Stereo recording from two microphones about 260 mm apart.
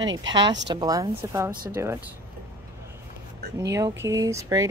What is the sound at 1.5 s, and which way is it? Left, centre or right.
Speech, right.